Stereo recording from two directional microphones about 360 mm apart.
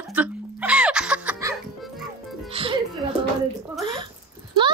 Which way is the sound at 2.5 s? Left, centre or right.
Centre.